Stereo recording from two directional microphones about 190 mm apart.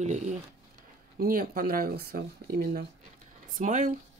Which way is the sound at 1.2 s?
50° right (ahead or behind).